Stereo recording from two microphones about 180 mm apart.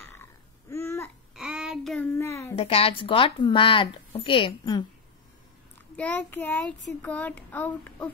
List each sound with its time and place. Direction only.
0.0 s babbling: 15° left (ahead or behind)
1.3 s child singing: centre (ahead or behind)
2.0 s a sound: 15° left (ahead or behind)
2.5 s speech: 30° left (ahead or behind)
5.9 s speech: 10° left (ahead or behind)